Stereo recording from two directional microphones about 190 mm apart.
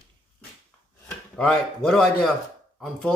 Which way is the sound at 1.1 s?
5° left (ahead or behind).